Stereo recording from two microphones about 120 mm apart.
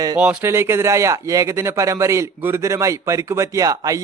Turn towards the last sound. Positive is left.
turn(degrees=-30)  # may be behind; listen again after turning